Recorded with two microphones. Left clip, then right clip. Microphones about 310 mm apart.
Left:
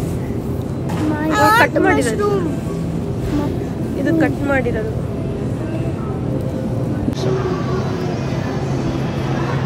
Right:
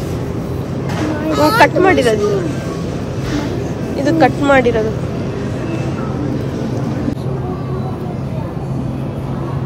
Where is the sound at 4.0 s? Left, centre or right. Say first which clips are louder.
Right 5 dB; centre.